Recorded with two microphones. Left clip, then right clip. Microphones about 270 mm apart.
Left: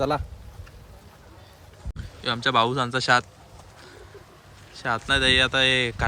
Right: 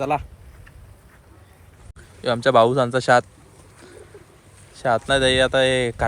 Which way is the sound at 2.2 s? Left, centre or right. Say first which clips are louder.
Right 6 dB; centre.